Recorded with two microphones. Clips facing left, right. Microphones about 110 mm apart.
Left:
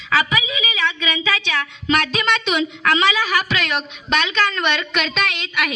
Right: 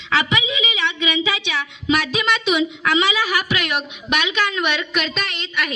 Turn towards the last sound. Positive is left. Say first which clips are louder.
# left 3 dB
turn(degrees=5)  # may be behind; listen again after turning